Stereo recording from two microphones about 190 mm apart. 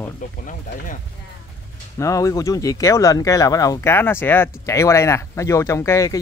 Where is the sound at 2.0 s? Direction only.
15° left (ahead or behind).